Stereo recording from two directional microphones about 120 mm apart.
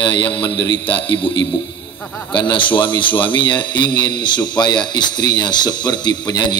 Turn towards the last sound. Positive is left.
turn(degrees=35)  # may be behind; listen again after turning